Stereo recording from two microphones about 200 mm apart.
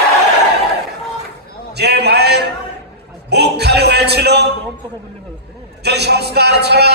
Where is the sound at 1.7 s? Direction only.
55° right (ahead or behind).